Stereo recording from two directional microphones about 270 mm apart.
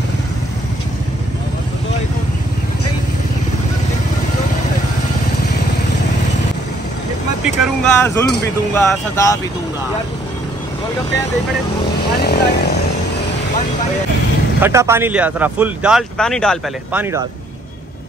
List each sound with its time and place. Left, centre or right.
7.4 s speech: centre
12.2 s speech: left
14.6 s speech: centre